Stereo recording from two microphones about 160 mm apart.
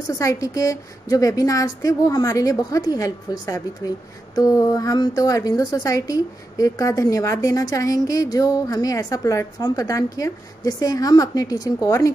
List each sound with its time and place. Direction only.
0.2 s a woman's voice: 20° left (ahead or behind)